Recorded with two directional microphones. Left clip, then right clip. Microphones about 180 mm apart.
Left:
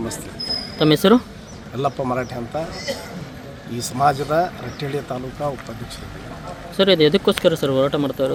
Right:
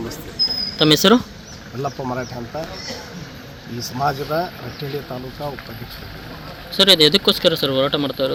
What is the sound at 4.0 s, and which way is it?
Speech, 15° left (ahead or behind).